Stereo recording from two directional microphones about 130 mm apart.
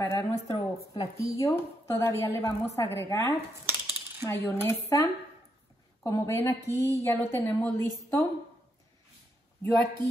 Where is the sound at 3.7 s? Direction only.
15° right (ahead or behind).